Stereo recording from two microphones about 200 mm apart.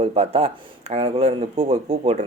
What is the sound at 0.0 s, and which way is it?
Speech, 30° right (ahead or behind).